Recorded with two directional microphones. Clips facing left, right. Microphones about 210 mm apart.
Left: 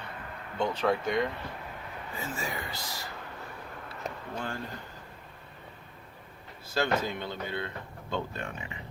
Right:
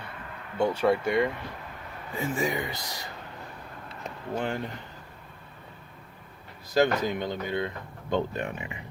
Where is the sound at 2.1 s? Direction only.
20° right (ahead or behind).